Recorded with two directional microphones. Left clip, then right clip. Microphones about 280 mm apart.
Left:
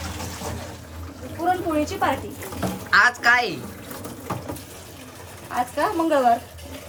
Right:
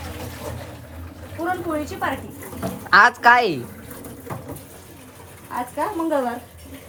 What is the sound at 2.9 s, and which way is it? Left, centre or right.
Speech, centre.